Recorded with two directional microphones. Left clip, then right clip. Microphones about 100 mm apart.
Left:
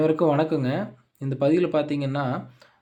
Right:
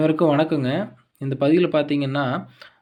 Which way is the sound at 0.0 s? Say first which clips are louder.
Right 2 dB; 10° right (ahead or behind).